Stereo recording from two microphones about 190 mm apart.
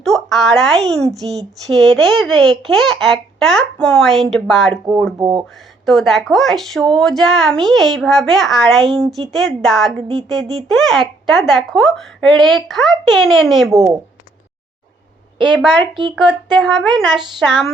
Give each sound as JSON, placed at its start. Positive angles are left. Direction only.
{"t": 0.0, "sound": "a woman's voice", "side_deg": 0}
{"t": 5.1, "sound": "speech", "side_deg": -25}
{"t": 5.8, "sound": "a woman's voice", "side_deg": 0}
{"t": 16.5, "sound": "a woman's voice", "side_deg": 0}